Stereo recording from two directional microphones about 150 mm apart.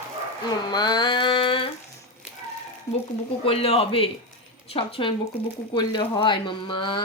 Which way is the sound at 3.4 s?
40° left (ahead or behind).